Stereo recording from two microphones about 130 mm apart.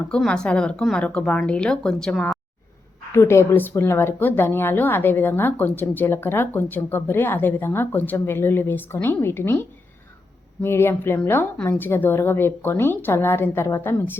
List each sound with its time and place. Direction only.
0.1 s speech: 5° left (ahead or behind)
3.1 s speech: 20° left (ahead or behind)